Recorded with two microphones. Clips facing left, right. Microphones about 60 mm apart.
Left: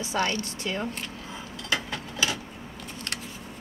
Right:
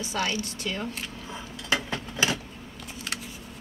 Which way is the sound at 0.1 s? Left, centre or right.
Centre.